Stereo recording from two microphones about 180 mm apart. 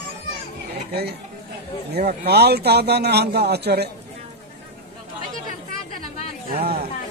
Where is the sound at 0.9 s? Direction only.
65° right (ahead or behind).